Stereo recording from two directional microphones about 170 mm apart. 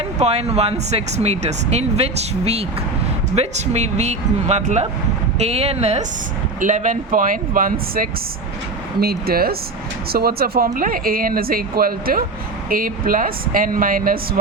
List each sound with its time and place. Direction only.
0.2 s speech: 40° right (ahead or behind); by 8.0 s 55° right (ahead or behind)
9.0 s speech: 65° right (ahead or behind)